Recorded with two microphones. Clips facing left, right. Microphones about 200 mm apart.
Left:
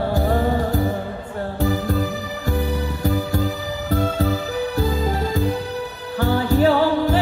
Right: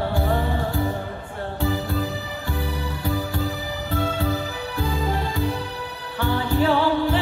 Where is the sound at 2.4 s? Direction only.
40° left (ahead or behind).